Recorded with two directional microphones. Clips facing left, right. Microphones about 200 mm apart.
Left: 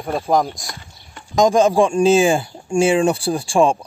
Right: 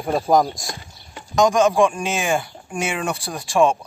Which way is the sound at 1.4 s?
30° left (ahead or behind).